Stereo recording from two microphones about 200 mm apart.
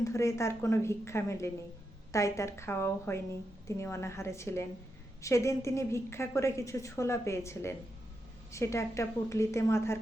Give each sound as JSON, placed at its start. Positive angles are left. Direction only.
{"t": 0.0, "sound": "a woman's voice", "side_deg": 15}